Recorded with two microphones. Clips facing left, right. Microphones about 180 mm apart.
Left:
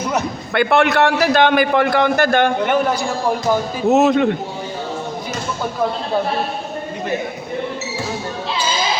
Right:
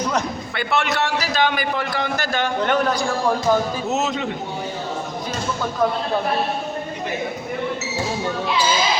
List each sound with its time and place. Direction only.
0.5 s a man's voice: 55° left (ahead or behind)
3.8 s a man's voice: 55° left (ahead or behind)